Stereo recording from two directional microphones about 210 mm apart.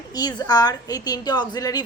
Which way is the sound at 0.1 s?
20° left (ahead or behind).